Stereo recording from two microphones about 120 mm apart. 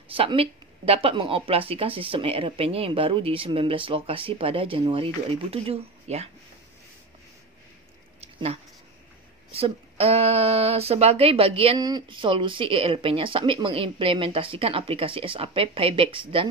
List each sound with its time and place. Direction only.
0.1 s speech: 50° right (ahead or behind)
8.2 s a sound: 60° right (ahead or behind)
9.5 s speech: 55° right (ahead or behind)
11.8 s speech: 40° right (ahead or behind)